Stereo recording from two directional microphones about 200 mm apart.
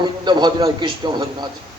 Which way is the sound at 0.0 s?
20° right (ahead or behind).